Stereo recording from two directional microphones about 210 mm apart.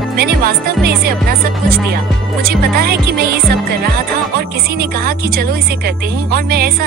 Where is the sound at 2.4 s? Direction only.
50° right (ahead or behind).